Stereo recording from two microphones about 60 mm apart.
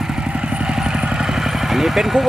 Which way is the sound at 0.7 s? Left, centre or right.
Centre.